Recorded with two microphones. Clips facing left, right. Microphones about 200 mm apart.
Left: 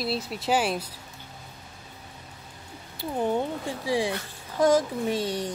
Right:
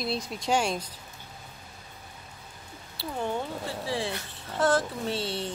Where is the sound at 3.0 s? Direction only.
15° left (ahead or behind).